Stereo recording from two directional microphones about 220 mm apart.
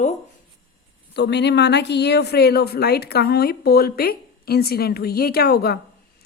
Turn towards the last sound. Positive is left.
turn(degrees=45)  # may be behind; listen again after turning